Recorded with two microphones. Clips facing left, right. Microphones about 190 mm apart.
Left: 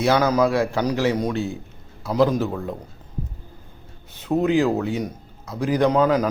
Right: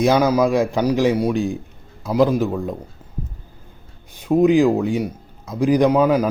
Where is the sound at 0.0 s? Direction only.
15° right (ahead or behind).